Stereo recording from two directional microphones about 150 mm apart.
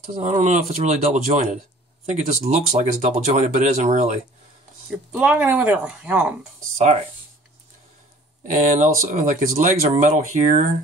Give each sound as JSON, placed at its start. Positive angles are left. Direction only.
{"t": 0.0, "sound": "speech", "side_deg": -50}
{"t": 5.1, "sound": "speech", "side_deg": -10}
{"t": 8.5, "sound": "speech", "side_deg": -55}